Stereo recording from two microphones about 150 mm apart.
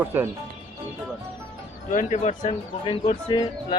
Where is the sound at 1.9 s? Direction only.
55° left (ahead or behind).